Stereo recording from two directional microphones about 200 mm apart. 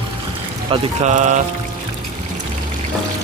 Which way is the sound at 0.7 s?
35° right (ahead or behind).